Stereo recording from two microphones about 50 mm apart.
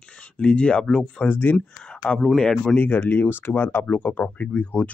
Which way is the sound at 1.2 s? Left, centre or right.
Left.